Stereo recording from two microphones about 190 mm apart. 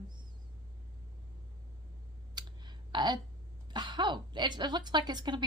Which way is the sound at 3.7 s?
25° right (ahead or behind).